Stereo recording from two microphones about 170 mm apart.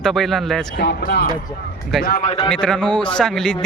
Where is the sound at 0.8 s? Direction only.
90° left.